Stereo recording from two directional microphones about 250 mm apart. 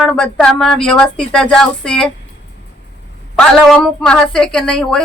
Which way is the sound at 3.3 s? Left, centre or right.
Centre.